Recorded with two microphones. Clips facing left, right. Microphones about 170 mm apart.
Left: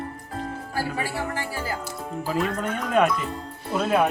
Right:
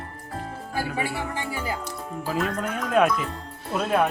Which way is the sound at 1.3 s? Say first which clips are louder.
Even; 20° right (ahead or behind).